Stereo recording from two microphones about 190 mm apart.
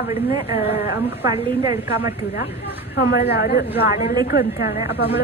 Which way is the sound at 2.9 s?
60° left (ahead or behind).